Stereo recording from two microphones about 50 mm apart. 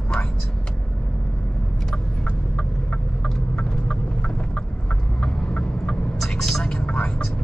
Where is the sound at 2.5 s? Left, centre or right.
Centre.